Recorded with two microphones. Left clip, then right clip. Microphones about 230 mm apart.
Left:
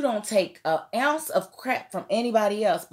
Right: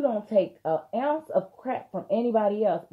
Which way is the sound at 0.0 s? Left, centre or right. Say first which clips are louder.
Even; left.